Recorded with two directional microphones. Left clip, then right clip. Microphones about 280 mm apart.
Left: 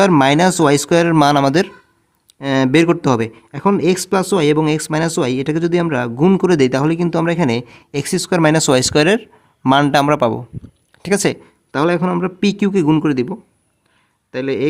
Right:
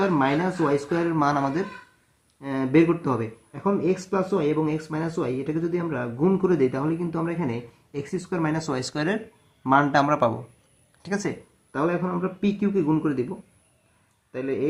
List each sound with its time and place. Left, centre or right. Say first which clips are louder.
0.0 s speech: left 11 dB; left
14.3 s speech: left 8 dB; left